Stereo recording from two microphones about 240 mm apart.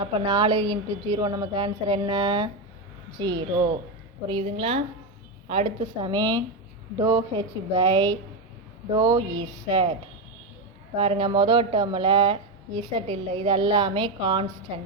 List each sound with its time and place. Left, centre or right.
0.0 s a woman's voice: centre
10.9 s speech: right